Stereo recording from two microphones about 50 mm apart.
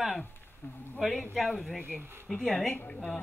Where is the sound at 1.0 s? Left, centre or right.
Centre.